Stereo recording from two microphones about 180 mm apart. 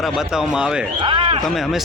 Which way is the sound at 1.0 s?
30° right (ahead or behind).